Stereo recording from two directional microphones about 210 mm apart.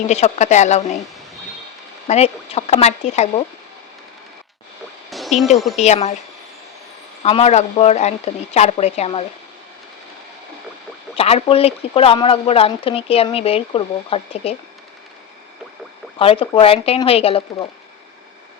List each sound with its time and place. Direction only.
0.1 s speech: 35° left (ahead or behind)
2.0 s speech: 30° left (ahead or behind)
5.1 s a sound: centre (ahead or behind)
5.7 s speech: 30° left (ahead or behind)
7.2 s speech: 30° left (ahead or behind)
11.1 s speech: 25° left (ahead or behind)
16.1 s speech: 25° left (ahead or behind)